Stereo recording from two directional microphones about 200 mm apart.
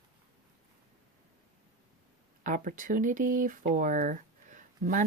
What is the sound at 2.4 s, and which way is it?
Speech, 40° right (ahead or behind).